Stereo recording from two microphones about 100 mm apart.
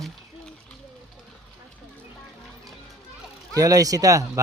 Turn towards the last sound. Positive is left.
turn(degrees=-35)  # may be behind; listen again after turning